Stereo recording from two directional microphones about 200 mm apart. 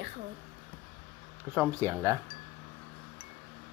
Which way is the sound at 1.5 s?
10° right (ahead or behind).